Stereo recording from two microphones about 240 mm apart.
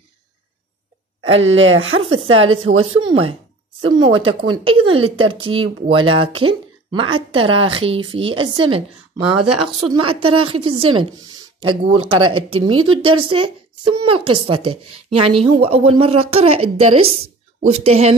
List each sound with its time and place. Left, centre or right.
1.3 s speech: right
3.0 s speech: centre
9.3 s speech: right
9.9 s speech: right
12.7 s speech: right
13.3 s speech: right